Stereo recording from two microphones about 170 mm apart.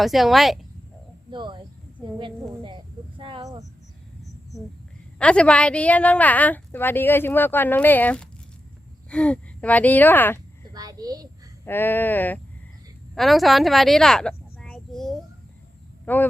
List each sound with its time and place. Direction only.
0.0 s speech: centre (ahead or behind)
1.3 s a sound: 30° right (ahead or behind)
5.2 s a woman's voice: 5° left (ahead or behind)
10.7 s a sound: 20° right (ahead or behind)
11.6 s a woman's voice: 10° left (ahead or behind)
13.1 s a woman's voice: centre (ahead or behind)